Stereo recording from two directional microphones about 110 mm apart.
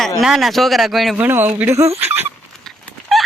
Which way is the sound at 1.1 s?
20° right (ahead or behind).